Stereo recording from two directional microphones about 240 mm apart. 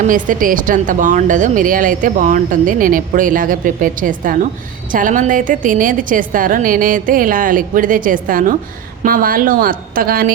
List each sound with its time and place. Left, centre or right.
0.1 s a woman's voice: right